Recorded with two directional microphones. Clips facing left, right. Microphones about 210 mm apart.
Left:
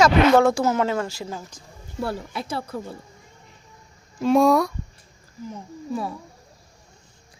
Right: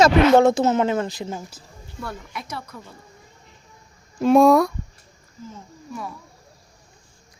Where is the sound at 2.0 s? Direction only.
30° left (ahead or behind).